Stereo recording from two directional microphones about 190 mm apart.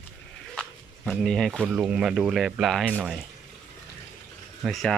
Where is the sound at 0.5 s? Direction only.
Centre (ahead or behind).